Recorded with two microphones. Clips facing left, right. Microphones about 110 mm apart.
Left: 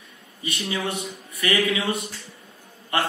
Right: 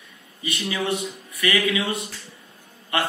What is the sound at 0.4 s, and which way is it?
Speech, 30° left (ahead or behind).